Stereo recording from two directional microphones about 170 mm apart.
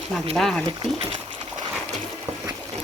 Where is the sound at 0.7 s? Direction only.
30° right (ahead or behind).